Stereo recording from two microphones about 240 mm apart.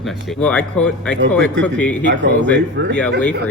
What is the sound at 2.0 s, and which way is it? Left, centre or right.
Speech, right.